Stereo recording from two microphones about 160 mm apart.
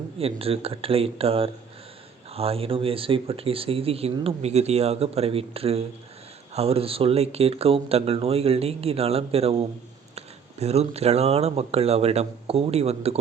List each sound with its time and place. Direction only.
0.2 s speech: 35° right (ahead or behind)